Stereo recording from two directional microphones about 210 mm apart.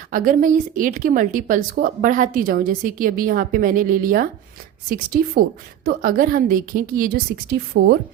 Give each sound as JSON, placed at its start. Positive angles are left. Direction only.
{"t": 0.1, "sound": "a woman's voice", "side_deg": -40}